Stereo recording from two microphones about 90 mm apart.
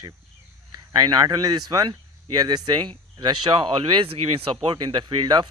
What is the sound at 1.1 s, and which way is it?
Speech, 45° right (ahead or behind).